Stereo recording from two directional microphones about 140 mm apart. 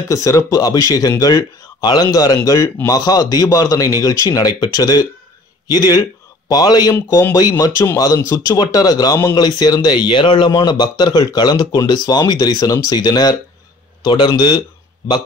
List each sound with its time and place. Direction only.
0.1 s a man's voice: 25° left (ahead or behind)